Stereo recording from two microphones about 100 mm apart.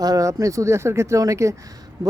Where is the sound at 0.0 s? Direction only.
35° right (ahead or behind).